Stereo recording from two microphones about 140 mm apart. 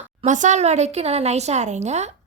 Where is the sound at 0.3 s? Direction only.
60° right (ahead or behind).